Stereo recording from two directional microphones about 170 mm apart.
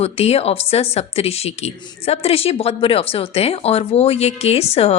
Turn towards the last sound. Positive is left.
turn(degrees=35)  # may be behind; listen again after turning